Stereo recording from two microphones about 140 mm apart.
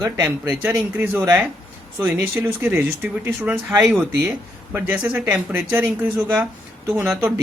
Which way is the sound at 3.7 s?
25° right (ahead or behind).